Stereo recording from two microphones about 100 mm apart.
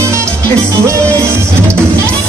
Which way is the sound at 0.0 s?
30° right (ahead or behind).